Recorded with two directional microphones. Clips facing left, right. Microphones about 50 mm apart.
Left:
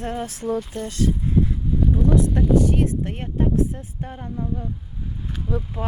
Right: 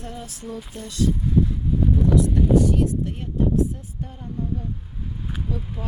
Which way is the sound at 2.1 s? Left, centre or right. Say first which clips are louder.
Even; left.